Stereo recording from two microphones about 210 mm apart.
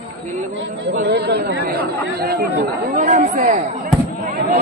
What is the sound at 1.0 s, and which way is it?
Speech, 50° right (ahead or behind).